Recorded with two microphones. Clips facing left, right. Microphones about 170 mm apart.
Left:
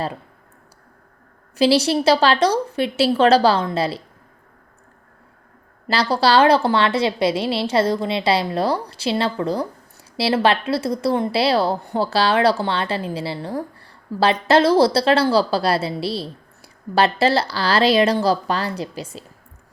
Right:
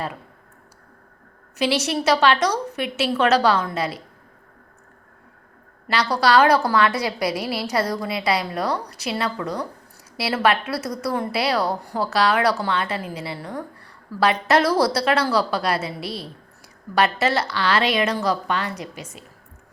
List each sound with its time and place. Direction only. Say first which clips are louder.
1.5 s a woman's voice: left 6 dB; 30° left (ahead or behind)
5.9 s a woman's voice: left 2 dB; 30° left (ahead or behind)